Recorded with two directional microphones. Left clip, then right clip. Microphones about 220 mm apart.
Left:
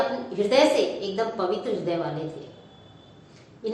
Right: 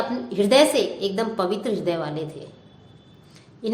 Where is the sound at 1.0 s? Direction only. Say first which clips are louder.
Right 3 dB; 55° right (ahead or behind).